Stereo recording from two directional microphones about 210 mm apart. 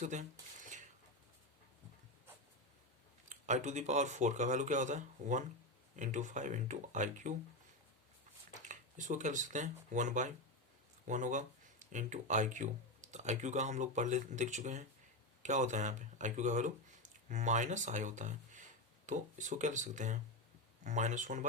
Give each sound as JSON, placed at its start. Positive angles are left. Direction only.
{"t": 0.0, "sound": "speech", "side_deg": -35}
{"t": 3.2, "sound": "speech", "side_deg": -35}
{"t": 8.6, "sound": "speech", "side_deg": -35}